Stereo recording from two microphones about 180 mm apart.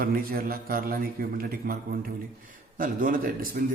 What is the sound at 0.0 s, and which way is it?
A man's voice, 55° right (ahead or behind).